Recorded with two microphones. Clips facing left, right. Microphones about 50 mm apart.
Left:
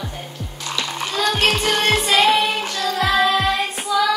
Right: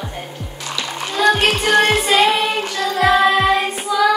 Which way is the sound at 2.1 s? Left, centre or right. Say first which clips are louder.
Right 1 dB; centre.